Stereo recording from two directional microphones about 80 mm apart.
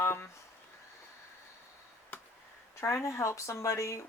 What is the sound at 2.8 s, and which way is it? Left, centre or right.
Speech, left.